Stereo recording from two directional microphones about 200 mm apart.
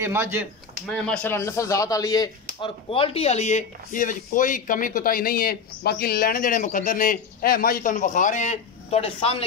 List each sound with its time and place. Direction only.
0.0 s speech: 10° right (ahead or behind)
0.8 s speech: 5° left (ahead or behind); by 9.4 s 30° left (ahead or behind)